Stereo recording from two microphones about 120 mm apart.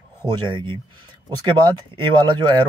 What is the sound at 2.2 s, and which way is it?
Speech, 40° right (ahead or behind).